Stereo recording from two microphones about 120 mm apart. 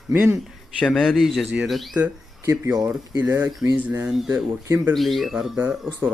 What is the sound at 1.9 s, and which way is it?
Speech, 15° right (ahead or behind).